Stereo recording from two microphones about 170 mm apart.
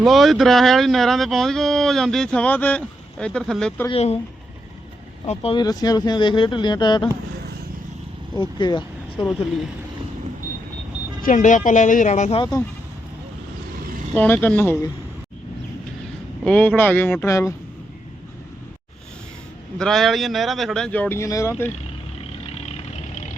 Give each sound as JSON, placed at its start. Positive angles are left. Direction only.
{"t": 0.0, "sound": "speech", "side_deg": 0}
{"t": 3.8, "sound": "speech", "side_deg": 35}
{"t": 5.2, "sound": "speech", "side_deg": 35}
{"t": 8.4, "sound": "speech", "side_deg": 25}
{"t": 11.2, "sound": "speech", "side_deg": 50}
{"t": 14.1, "sound": "speech", "side_deg": 5}
{"t": 16.4, "sound": "speech", "side_deg": 5}
{"t": 19.8, "sound": "speech", "side_deg": 0}
{"t": 22.5, "sound": "vehicle", "side_deg": 35}